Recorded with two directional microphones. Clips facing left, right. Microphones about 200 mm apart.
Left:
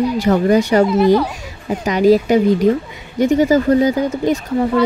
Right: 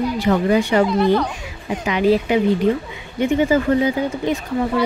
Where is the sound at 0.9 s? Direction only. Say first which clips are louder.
Left 4 dB; 5° left (ahead or behind).